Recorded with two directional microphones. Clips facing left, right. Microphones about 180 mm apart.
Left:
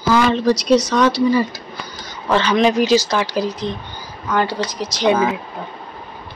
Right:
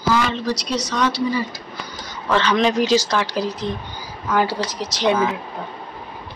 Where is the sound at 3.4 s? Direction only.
5° right (ahead or behind).